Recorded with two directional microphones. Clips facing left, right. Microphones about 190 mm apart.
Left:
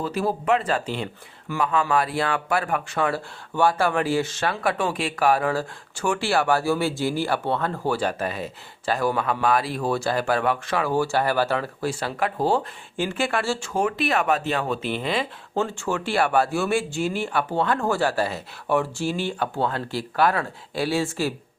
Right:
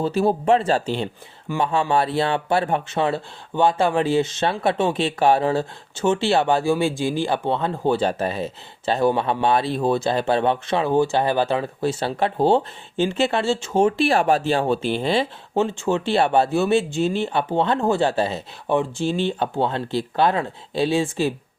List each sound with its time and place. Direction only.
0.0 s speech: 25° right (ahead or behind)